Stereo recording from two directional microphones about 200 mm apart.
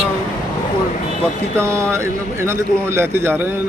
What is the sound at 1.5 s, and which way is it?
A man's voice, 15° right (ahead or behind).